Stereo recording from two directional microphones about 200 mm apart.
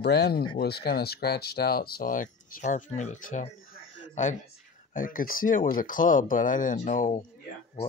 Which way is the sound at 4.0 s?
35° left (ahead or behind).